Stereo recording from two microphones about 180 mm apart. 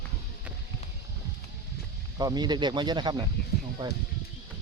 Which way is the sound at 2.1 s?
20° right (ahead or behind).